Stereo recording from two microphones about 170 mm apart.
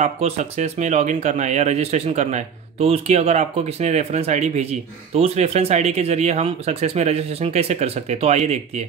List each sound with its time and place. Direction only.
0.0 s speech: 40° right (ahead or behind)